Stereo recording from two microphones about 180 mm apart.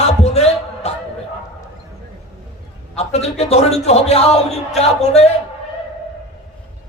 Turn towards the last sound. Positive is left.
turn(degrees=35)  # may be behind; listen again after turning